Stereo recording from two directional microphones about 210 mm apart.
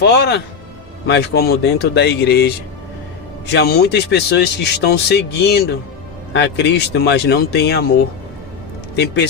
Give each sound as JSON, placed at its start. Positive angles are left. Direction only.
{"t": 0.0, "sound": "speech", "side_deg": 55}